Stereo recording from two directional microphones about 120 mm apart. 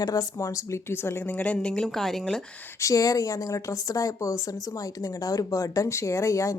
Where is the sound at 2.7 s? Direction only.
25° left (ahead or behind).